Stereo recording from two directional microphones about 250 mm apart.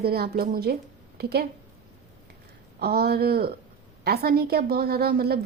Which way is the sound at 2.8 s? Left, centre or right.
Right.